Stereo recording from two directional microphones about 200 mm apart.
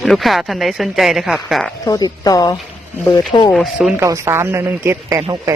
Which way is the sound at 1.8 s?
20° left (ahead or behind).